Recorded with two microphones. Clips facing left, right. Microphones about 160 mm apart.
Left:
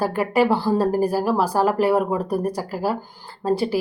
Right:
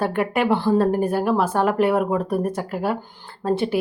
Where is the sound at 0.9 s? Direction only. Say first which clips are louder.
Left 1 dB; 35° left (ahead or behind).